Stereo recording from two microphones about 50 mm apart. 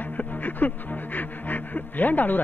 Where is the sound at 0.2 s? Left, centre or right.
Left.